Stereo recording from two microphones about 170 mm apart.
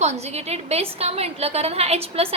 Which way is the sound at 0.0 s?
40° right (ahead or behind).